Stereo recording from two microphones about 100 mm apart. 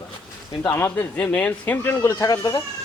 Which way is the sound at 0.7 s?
20° left (ahead or behind).